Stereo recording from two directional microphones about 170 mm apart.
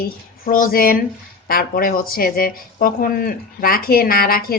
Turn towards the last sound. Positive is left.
turn(degrees=60)  # may be behind; listen again after turning